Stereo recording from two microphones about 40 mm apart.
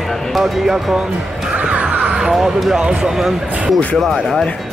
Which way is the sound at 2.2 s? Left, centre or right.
Centre.